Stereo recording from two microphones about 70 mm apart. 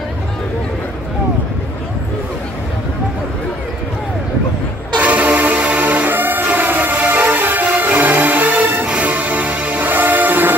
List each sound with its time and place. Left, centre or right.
4.9 s music: right